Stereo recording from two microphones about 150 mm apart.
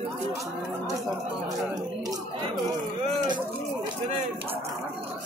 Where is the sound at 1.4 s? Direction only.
25° right (ahead or behind).